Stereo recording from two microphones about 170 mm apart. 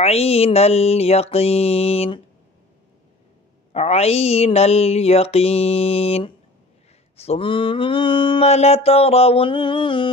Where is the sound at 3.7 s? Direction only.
40° left (ahead or behind).